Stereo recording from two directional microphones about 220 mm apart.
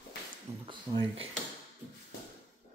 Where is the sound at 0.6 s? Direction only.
25° right (ahead or behind).